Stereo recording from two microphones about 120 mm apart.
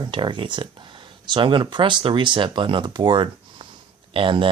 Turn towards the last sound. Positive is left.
turn(degrees=-45)  # may be behind; listen again after turning